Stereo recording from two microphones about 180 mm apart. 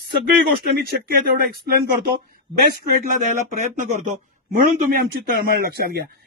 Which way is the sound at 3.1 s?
45° right (ahead or behind).